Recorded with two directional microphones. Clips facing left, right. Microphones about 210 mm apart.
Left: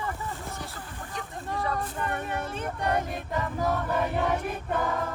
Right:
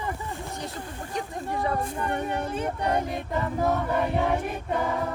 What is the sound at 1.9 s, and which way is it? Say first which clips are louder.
Music: right 3 dB; 15° right (ahead or behind).